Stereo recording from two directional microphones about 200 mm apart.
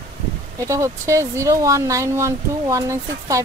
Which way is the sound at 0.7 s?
15° right (ahead or behind).